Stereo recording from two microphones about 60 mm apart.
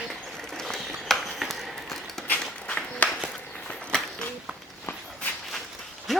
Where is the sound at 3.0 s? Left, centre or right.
Left.